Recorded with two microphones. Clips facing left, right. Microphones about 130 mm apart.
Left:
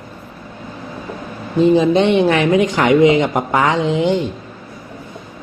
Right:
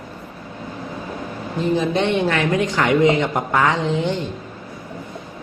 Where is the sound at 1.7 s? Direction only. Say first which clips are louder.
Left 6 dB; 20° left (ahead or behind).